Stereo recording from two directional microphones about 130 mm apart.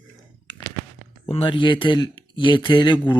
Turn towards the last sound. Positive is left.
turn(degrees=35)  # may be behind; listen again after turning